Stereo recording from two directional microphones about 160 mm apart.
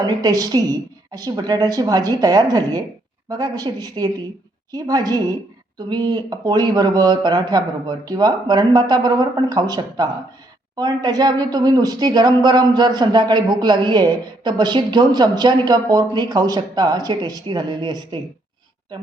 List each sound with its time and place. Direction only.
0.0 s speech: 25° right (ahead or behind)